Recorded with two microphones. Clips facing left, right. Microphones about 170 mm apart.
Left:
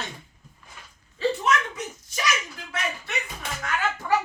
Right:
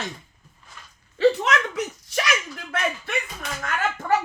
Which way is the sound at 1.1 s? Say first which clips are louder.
Right 5 dB; 90° right.